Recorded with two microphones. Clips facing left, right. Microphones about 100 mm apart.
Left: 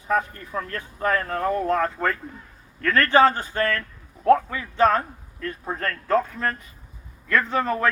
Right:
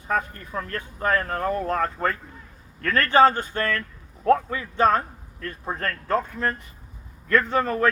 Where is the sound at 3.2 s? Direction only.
40° right (ahead or behind).